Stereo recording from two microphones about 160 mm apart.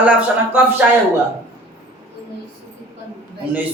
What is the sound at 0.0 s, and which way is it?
Speech, 10° right (ahead or behind).